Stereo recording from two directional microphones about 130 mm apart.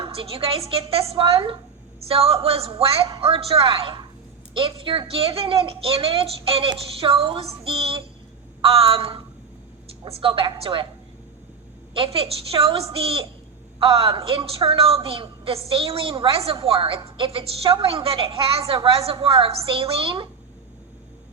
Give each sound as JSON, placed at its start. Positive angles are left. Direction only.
{"t": 0.0, "sound": "speech", "side_deg": -45}
{"t": 11.9, "sound": "speech", "side_deg": -45}